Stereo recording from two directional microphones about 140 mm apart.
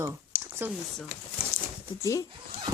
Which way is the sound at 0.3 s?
75° left (ahead or behind).